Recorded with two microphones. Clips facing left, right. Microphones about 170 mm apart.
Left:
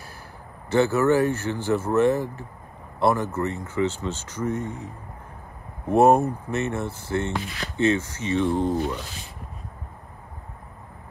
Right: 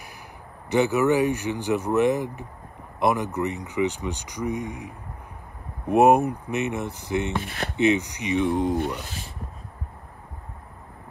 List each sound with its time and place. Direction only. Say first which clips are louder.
0.7 s speech: left 1 dB; 15° right (ahead or behind)
7.4 s speech: right 3 dB; 55° right (ahead or behind)
7.7 s speech: right 1 dB; 15° right (ahead or behind)